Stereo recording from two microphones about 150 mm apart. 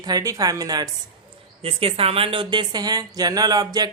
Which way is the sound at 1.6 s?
40° right (ahead or behind).